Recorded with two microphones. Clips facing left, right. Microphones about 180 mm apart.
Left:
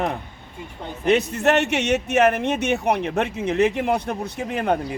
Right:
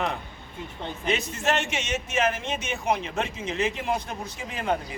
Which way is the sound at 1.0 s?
65° left (ahead or behind).